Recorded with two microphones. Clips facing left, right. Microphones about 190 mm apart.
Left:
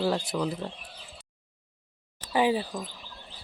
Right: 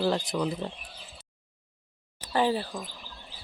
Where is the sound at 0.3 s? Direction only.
Centre (ahead or behind).